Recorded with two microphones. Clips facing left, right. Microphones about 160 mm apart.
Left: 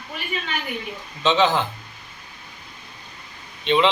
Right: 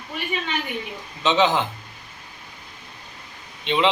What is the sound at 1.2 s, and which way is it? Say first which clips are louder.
Speech: even; 20° right (ahead or behind).